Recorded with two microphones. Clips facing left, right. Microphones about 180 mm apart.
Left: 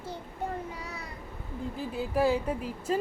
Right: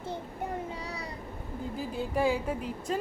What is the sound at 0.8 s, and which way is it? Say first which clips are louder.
Speech: right 2 dB; 35° right (ahead or behind).